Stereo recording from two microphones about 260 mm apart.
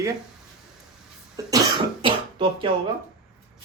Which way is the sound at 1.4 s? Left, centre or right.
Centre.